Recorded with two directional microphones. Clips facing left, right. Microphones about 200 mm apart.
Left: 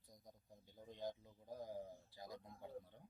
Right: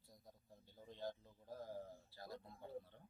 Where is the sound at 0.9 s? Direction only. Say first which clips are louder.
Left 1 dB; 15° left (ahead or behind).